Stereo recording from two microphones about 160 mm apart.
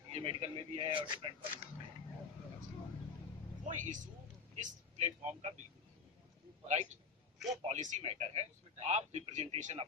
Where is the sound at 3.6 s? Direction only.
50° right (ahead or behind).